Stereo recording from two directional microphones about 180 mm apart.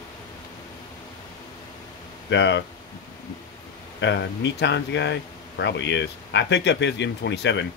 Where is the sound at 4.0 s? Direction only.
75° left (ahead or behind).